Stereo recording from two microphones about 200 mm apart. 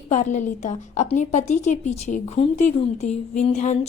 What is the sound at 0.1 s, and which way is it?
A woman's voice, 35° left (ahead or behind).